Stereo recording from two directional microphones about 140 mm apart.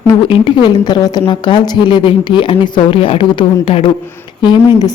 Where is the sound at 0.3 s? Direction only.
40° left (ahead or behind).